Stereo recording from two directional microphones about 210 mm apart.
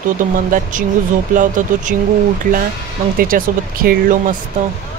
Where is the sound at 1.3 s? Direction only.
40° right (ahead or behind).